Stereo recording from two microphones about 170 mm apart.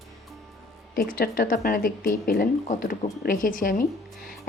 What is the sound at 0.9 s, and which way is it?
A woman's voice, 60° left (ahead or behind).